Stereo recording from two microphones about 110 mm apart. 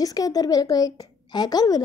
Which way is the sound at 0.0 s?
35° left (ahead or behind).